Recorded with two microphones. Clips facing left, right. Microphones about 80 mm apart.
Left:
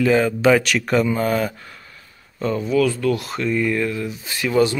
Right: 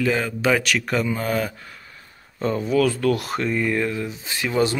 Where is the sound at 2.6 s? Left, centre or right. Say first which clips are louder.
Left 1 dB; right.